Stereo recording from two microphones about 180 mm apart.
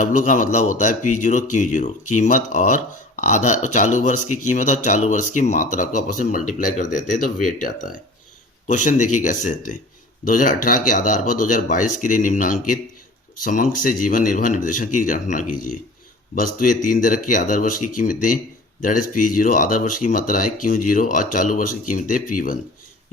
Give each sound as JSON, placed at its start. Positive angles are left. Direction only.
{"t": 0.0, "sound": "speech", "side_deg": 45}
{"t": 8.6, "sound": "speech", "side_deg": 45}